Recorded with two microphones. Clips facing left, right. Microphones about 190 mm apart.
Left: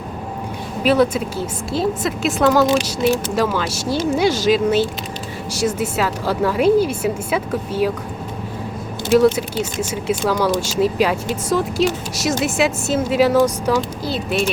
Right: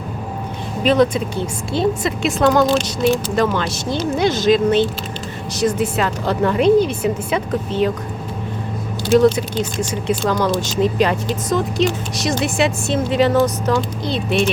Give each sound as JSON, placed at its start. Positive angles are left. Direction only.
{"t": 0.9, "sound": "a woman's voice", "side_deg": 10}
{"t": 9.9, "sound": "a woman's voice", "side_deg": 10}